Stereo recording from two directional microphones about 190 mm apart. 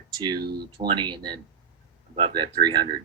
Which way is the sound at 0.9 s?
25° right (ahead or behind).